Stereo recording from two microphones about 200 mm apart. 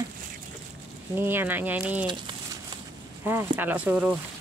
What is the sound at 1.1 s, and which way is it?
Speech, 10° right (ahead or behind).